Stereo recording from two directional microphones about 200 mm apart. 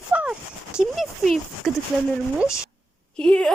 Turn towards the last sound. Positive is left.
turn(degrees=5)  # may be behind; listen again after turning